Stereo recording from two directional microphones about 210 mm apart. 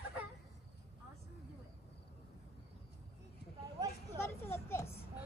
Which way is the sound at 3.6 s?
15° right (ahead or behind).